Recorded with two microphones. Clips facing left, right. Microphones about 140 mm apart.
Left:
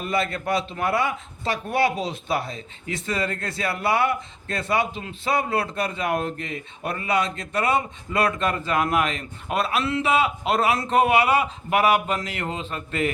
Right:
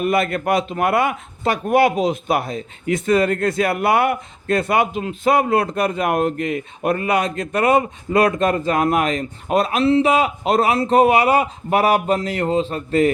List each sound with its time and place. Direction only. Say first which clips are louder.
0.0 s speech: right 7 dB; 55° right (ahead or behind); by 13.1 s 35° right (ahead or behind)